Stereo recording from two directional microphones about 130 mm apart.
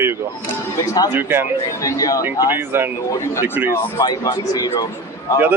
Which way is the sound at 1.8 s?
30° left (ahead or behind).